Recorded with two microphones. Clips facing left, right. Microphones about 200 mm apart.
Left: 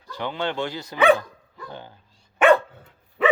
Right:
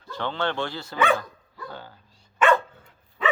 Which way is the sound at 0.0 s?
15° left (ahead or behind).